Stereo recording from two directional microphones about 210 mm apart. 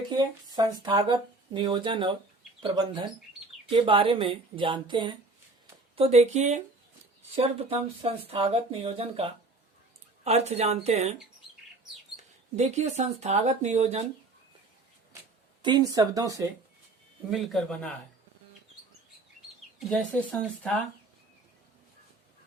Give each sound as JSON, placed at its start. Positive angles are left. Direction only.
{"t": 0.1, "sound": "a woman's voice", "side_deg": -20}
{"t": 12.1, "sound": "speech", "side_deg": -35}
{"t": 15.6, "sound": "speech", "side_deg": -20}
{"t": 17.3, "sound": "speech", "side_deg": 0}
{"t": 19.8, "sound": "speech", "side_deg": 5}